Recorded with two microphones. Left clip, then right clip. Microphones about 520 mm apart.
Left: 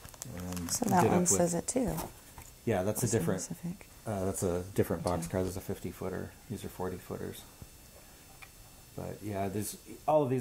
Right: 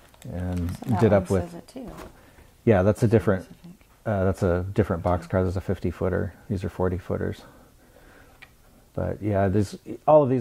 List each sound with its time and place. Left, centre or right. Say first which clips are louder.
0.9 s speech: right 6 dB; left
2.6 s speech: right 11 dB; right
8.9 s speech: right 12 dB; right